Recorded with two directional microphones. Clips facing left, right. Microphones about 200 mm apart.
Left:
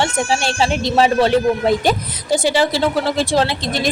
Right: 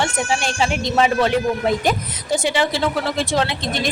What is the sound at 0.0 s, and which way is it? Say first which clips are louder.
A woman's voice: left 3 dB; 30° left (ahead or behind).